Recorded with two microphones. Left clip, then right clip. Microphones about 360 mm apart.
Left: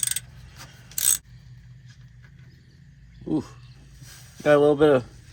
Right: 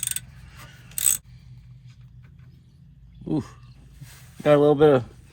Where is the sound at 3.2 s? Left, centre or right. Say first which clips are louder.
Left 1 dB; right.